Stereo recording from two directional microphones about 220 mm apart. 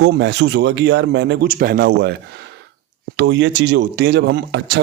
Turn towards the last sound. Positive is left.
turn(degrees=-50)  # may be behind; listen again after turning